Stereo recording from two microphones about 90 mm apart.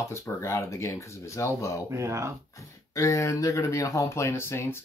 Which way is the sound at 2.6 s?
35° left (ahead or behind).